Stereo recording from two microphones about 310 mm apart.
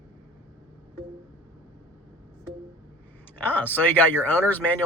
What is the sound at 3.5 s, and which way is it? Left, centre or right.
Speech, centre.